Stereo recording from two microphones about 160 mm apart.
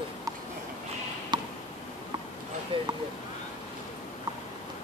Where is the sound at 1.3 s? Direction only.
25° right (ahead or behind).